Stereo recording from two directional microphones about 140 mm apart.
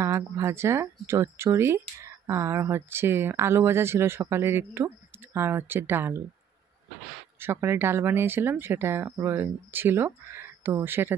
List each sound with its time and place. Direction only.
0.0 s speech: 20° right (ahead or behind)
7.3 s speech: 15° right (ahead or behind)